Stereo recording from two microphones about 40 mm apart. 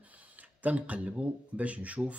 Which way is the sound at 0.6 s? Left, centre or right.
Right.